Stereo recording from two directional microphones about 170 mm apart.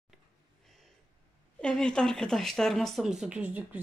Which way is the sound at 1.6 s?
5° left (ahead or behind).